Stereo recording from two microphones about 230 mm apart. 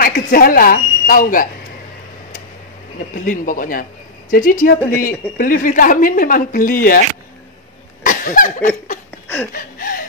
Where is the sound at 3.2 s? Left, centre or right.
Left.